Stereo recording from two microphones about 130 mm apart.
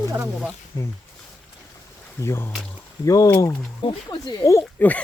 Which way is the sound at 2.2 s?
20° left (ahead or behind).